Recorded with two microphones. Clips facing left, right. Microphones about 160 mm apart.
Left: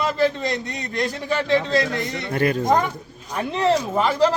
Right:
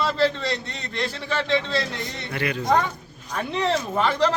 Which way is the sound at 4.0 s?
10° left (ahead or behind).